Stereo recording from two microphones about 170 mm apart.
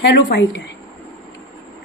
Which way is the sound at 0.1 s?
85° left.